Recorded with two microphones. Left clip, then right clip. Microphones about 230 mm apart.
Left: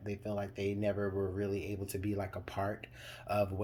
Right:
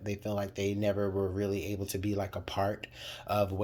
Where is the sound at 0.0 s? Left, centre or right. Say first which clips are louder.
Right 4 dB; right.